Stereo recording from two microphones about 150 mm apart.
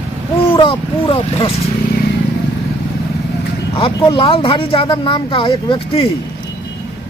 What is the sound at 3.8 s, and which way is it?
Speech, 35° left (ahead or behind).